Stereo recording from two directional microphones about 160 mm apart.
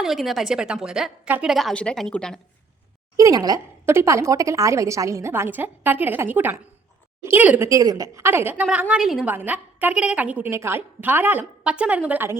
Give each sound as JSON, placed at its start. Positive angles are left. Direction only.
{"t": 0.0, "sound": "a woman's voice", "side_deg": 0}
{"t": 3.2, "sound": "a woman's voice", "side_deg": -20}